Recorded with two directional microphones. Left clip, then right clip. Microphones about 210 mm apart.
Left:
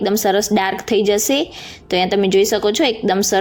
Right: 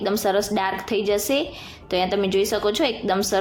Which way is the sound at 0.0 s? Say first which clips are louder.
Left 5 dB; 25° left (ahead or behind).